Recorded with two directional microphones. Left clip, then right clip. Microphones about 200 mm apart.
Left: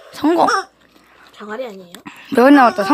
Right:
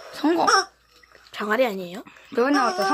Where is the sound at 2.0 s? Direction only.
45° left (ahead or behind).